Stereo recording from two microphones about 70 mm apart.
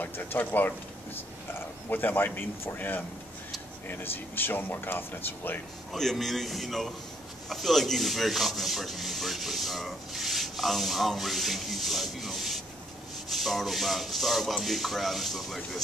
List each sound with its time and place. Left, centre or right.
0.0 s speech: left
1.9 s speech: left
4.0 s speech: left
5.9 s speech: centre